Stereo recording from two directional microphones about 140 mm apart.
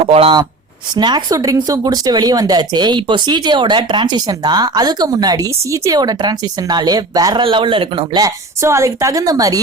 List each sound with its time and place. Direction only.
0.0 s speech: 45° right (ahead or behind)
0.9 s speech: 30° right (ahead or behind)
7.4 s speech: 40° right (ahead or behind)